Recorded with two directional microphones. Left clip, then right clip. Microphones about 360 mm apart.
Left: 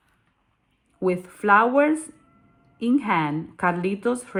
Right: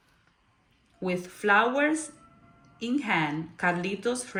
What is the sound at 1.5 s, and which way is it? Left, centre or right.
A woman's voice, centre.